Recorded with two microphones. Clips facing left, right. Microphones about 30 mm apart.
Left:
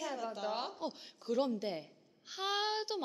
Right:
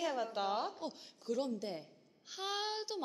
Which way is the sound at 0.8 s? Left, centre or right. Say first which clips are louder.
Left 3 dB; centre.